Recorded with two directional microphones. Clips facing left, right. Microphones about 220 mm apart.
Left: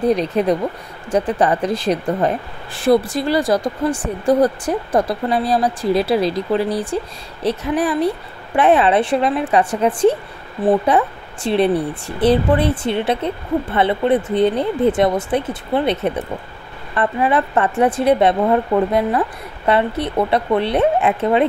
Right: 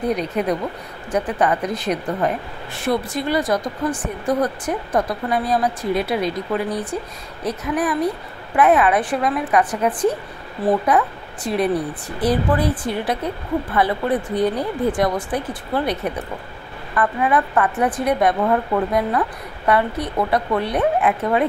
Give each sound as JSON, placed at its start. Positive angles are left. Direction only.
{"t": 0.1, "sound": "a woman's voice", "side_deg": 30}